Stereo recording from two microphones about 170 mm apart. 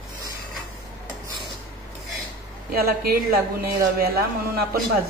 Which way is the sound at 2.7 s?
65° right (ahead or behind).